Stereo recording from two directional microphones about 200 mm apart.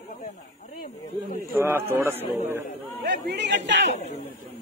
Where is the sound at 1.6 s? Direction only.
10° right (ahead or behind).